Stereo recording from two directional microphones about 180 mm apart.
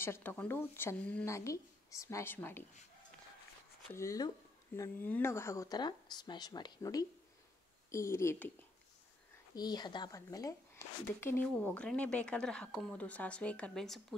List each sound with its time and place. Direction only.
0.0 s speech: 15° left (ahead or behind)
3.9 s speech: 15° left (ahead or behind)
9.6 s speech: 25° left (ahead or behind); by 14.0 s centre (ahead or behind)